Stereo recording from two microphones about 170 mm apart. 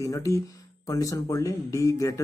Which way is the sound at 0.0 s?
20° left (ahead or behind).